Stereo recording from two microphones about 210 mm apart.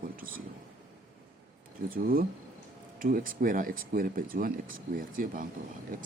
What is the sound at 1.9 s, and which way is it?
Speech, 45° right (ahead or behind).